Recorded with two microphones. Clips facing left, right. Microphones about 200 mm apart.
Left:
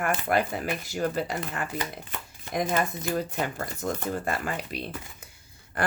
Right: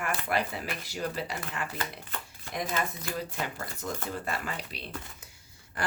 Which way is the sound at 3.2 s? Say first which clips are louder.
Left 4 dB; 50° left (ahead or behind).